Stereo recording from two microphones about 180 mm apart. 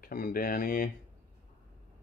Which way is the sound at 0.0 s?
55° left (ahead or behind).